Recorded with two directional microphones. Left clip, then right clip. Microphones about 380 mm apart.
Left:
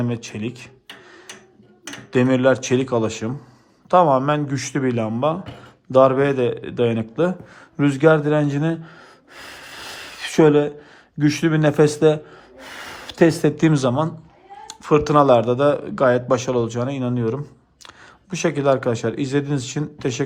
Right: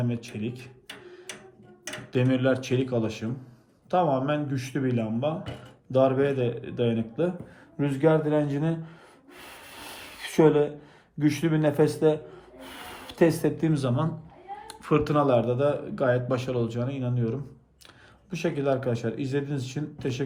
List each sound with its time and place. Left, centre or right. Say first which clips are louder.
0.0 s a man's voice: left 6 dB; centre
2.1 s a man's voice: left 8 dB; centre
9.3 s a sound: left 8 dB; left
11.2 s a man's voice: left 6 dB; left